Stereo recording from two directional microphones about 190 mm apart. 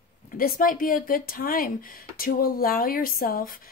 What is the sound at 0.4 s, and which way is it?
Speech, 50° left (ahead or behind).